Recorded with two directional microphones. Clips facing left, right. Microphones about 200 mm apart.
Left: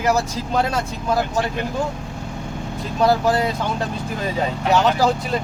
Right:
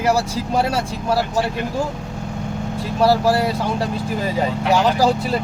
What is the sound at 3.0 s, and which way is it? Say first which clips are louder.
Speech: right 1 dB; 5° right (ahead or behind).